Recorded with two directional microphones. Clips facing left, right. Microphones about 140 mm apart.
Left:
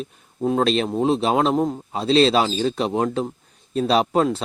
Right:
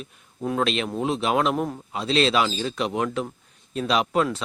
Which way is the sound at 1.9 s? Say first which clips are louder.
Left 5 dB; 35° left (ahead or behind).